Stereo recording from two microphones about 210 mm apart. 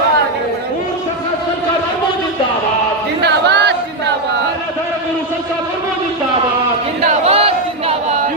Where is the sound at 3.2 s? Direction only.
55° right (ahead or behind).